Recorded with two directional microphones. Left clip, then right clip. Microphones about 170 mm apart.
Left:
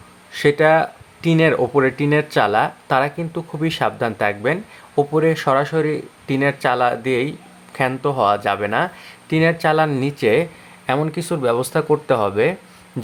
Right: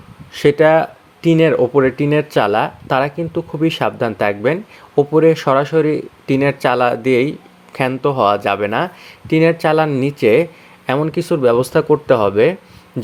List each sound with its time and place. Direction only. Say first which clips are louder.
0.3 s speech: right 3 dB; 20° right (ahead or behind)